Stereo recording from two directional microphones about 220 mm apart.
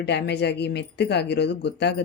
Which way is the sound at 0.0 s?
50° left (ahead or behind).